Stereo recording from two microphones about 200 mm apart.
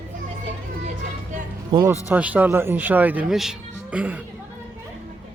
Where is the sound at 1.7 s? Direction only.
15° right (ahead or behind).